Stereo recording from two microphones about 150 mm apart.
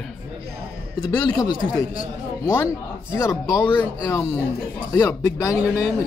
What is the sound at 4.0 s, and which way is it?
A man's voice, 25° left (ahead or behind).